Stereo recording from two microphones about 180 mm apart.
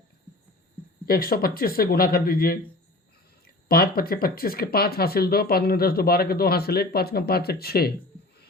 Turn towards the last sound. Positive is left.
turn(degrees=60)  # may be behind; listen again after turning